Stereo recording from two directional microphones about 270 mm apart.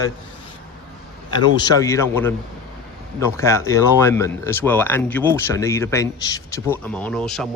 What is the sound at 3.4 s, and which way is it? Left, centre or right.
Speech, centre.